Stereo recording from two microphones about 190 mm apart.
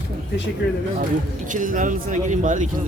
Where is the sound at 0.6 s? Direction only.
55° left (ahead or behind).